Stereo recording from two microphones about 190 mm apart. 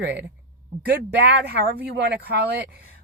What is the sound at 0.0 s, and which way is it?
Speech, 65° right (ahead or behind).